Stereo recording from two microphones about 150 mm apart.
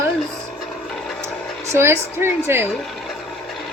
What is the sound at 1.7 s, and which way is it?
Speech, 15° right (ahead or behind).